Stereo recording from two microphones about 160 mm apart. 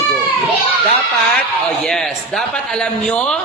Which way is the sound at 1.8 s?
Centre (ahead or behind).